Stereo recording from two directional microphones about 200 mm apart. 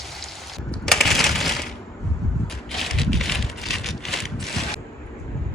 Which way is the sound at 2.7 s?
Centre (ahead or behind).